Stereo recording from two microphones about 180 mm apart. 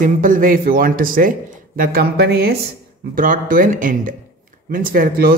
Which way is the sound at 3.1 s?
50° right (ahead or behind).